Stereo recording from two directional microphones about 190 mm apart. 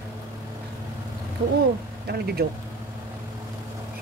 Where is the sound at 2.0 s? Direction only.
55° right (ahead or behind).